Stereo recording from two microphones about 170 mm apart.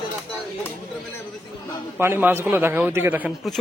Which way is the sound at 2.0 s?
15° right (ahead or behind).